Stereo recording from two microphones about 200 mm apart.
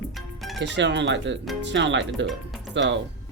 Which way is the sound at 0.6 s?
60° right (ahead or behind).